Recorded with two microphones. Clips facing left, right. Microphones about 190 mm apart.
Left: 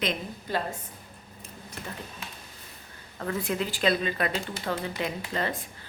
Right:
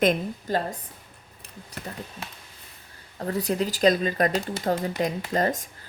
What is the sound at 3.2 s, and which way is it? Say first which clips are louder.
Speech: right 4 dB; 40° right (ahead or behind).